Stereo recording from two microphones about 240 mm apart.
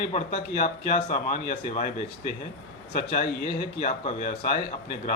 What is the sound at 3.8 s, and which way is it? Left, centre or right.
Speech, left.